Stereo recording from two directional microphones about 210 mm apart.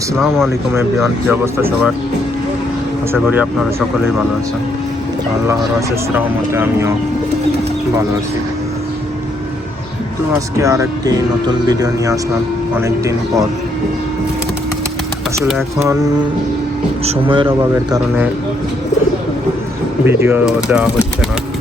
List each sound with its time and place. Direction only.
0.4 s speech: 10° right (ahead or behind)
3.1 s speech: 10° right (ahead or behind)
6.1 s speech: 10° right (ahead or behind)
10.6 s speech: 15° right (ahead or behind)
15.5 s speech: 15° right (ahead or behind)
17.1 s speech: 25° right (ahead or behind)
20.1 s speech: 10° right (ahead or behind)